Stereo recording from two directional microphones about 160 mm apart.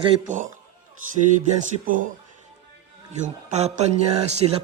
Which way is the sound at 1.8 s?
55° right (ahead or behind).